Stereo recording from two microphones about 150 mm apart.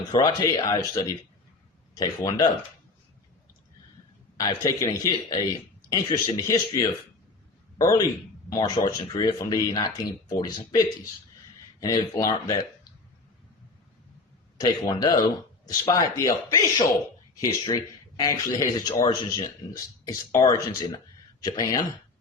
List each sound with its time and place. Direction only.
0.1 s a man's voice: 20° left (ahead or behind)
4.4 s a man's voice: 25° left (ahead or behind)
14.6 s a man's voice: 25° left (ahead or behind)